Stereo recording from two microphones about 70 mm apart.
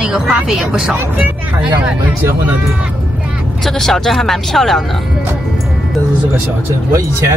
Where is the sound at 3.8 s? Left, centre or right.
Centre.